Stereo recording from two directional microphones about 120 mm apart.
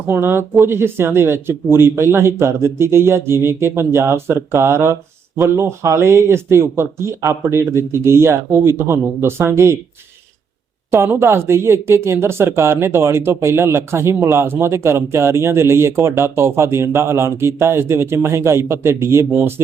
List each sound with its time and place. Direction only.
0.1 s speech: 20° right (ahead or behind)
10.9 s speech: 20° right (ahead or behind)